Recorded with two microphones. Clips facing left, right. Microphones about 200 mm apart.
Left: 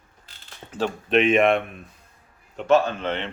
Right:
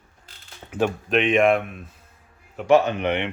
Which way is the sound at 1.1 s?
Centre (ahead or behind).